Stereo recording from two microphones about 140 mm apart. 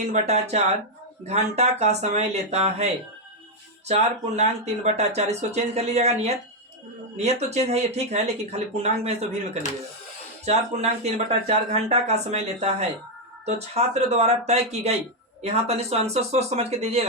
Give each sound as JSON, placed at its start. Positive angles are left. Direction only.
{"t": 0.1, "sound": "speech", "side_deg": -50}
{"t": 10.4, "sound": "speech", "side_deg": -50}